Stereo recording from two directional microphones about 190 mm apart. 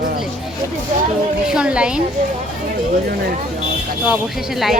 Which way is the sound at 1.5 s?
5° right (ahead or behind).